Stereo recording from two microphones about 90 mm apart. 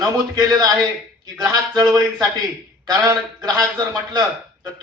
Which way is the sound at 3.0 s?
40° right (ahead or behind).